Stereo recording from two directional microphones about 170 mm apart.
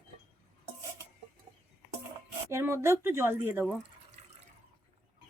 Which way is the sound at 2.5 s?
15° right (ahead or behind).